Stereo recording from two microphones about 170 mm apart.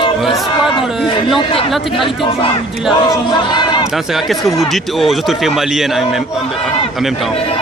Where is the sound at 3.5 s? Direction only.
25° left (ahead or behind).